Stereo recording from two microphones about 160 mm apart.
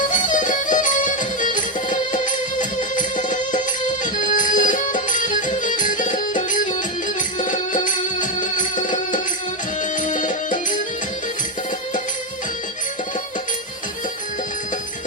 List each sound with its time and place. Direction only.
0.1 s music: 55° left (ahead or behind)
10.0 s music: 55° left (ahead or behind)